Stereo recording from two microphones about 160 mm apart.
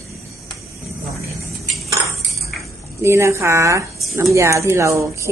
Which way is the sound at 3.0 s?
15° right (ahead or behind).